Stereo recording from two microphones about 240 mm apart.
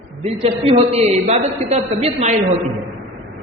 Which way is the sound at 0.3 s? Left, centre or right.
Right.